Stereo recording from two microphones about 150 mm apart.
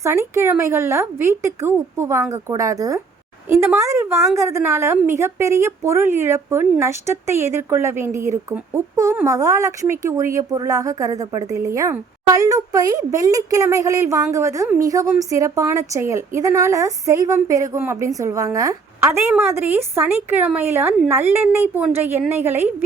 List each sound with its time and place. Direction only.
0.0 s a woman's voice: 15° right (ahead or behind)